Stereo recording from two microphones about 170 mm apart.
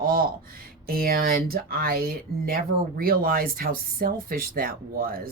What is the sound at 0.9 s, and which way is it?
Speech, 60° right (ahead or behind).